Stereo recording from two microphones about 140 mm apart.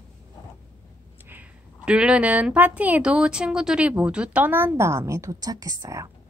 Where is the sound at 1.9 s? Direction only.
5° right (ahead or behind); by 6.0 s 25° right (ahead or behind).